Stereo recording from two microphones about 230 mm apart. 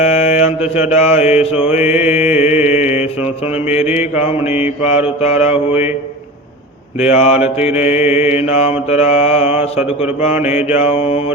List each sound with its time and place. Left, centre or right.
0.0 s mantra: left
7.0 s mantra: left